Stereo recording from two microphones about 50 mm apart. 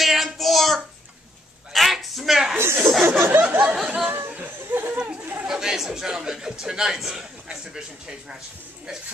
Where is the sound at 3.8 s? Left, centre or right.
Right.